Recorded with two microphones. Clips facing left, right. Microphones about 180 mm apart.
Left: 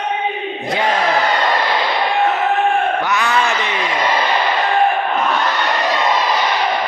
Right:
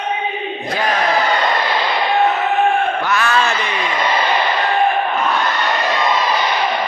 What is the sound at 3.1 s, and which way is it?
Speech, 15° left (ahead or behind).